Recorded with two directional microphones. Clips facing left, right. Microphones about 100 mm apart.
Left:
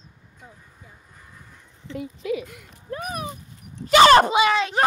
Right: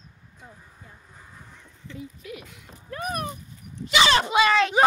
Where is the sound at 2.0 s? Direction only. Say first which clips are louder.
Left 11 dB; 65° left (ahead or behind).